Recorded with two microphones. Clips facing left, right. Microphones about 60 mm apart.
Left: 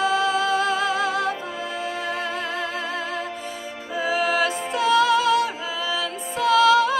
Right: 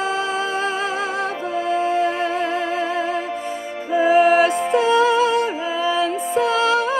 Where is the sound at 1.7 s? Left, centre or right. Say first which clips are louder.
Right 12 dB; right.